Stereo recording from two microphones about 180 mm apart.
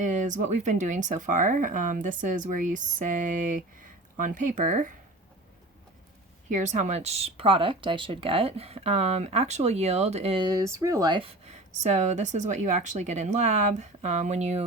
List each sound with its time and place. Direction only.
0.0 s speech: 45° right (ahead or behind)
6.5 s speech: 40° right (ahead or behind)